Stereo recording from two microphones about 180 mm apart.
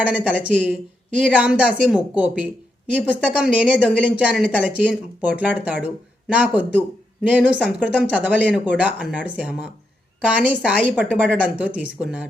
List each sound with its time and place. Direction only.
0.0 s speech: 5° right (ahead or behind)